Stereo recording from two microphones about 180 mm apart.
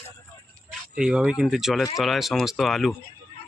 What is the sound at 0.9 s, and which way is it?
Speech, 5° right (ahead or behind).